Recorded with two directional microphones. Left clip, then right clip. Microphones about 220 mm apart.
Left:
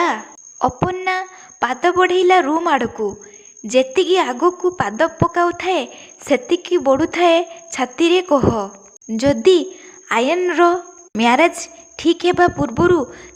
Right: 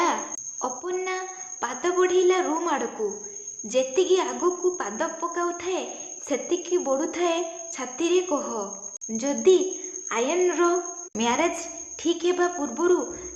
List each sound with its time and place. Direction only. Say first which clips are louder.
0.6 s a woman's voice: left 11 dB; 40° left (ahead or behind)